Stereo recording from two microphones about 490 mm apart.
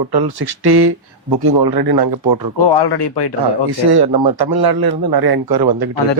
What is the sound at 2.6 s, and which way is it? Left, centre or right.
Speech, left.